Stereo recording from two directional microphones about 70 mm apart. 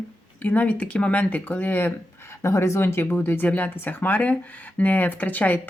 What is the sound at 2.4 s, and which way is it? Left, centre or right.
Speech, left.